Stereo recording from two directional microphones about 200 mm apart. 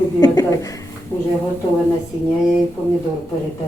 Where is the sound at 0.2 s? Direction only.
20° left (ahead or behind).